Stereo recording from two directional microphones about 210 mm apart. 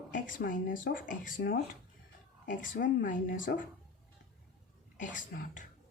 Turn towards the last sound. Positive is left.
turn(degrees=40)  # may be behind; listen again after turning